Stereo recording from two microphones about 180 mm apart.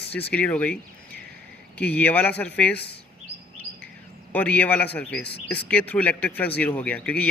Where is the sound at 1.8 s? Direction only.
10° left (ahead or behind).